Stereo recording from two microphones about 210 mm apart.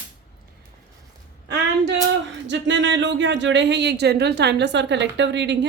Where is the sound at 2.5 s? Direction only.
60° right (ahead or behind).